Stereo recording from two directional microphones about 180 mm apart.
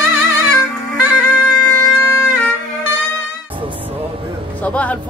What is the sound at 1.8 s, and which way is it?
Wind instrument, 15° left (ahead or behind).